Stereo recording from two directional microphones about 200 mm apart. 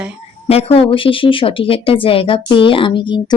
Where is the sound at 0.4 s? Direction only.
30° left (ahead or behind).